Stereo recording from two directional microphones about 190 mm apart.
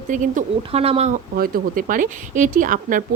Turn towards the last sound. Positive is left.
turn(degrees=-45)  # may be behind; listen again after turning